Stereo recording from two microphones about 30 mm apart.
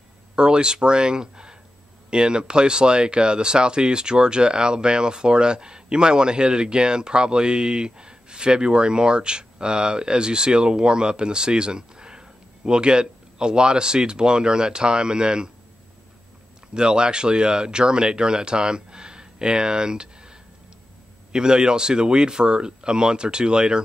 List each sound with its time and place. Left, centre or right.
0.4 s speech: right
16.7 s speech: right